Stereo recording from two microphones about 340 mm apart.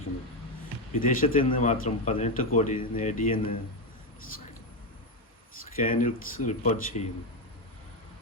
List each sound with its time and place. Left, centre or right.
0.9 s a man's voice: left
5.7 s a man's voice: left